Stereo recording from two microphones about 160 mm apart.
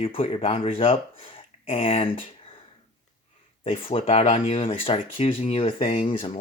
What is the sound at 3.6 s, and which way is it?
Speech, 35° left (ahead or behind).